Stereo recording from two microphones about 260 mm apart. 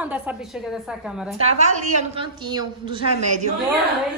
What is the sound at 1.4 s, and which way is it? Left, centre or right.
A woman's voice, right.